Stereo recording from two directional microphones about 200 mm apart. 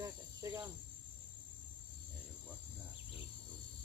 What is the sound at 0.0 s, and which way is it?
Cricket, 15° right (ahead or behind).